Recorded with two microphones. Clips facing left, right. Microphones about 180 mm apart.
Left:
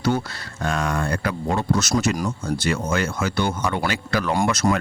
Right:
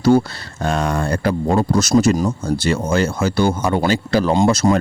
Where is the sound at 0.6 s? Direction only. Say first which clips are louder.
Right 4 dB; 30° right (ahead or behind).